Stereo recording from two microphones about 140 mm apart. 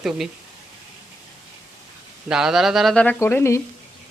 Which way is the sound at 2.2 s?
5° right (ahead or behind).